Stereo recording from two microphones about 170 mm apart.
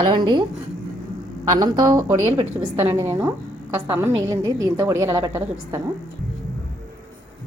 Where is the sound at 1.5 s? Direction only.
20° right (ahead or behind).